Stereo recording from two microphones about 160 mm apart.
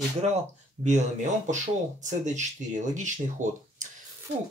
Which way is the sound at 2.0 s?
50° right (ahead or behind).